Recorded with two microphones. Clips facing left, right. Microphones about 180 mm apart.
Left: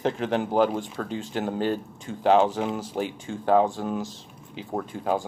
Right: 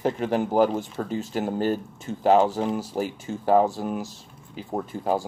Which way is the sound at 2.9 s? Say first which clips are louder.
Right 1 dB; 5° right (ahead or behind).